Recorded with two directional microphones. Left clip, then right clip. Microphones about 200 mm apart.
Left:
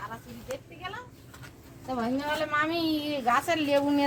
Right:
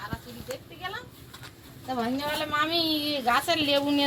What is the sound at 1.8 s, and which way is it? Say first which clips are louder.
A woman's voice: right 1 dB; centre (ahead or behind).